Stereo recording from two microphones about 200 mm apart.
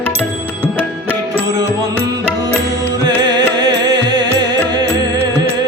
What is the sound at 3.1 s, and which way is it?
Music, 20° right (ahead or behind).